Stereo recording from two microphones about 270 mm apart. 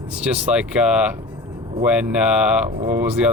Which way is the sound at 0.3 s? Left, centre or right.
Centre.